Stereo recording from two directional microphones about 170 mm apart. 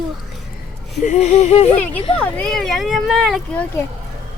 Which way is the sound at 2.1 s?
5° left (ahead or behind).